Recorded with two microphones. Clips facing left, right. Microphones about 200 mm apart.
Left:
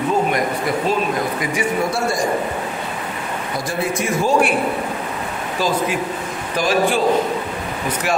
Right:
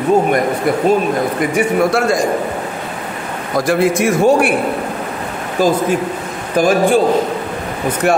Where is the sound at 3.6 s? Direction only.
90° right; by 4.5 s 65° right (ahead or behind).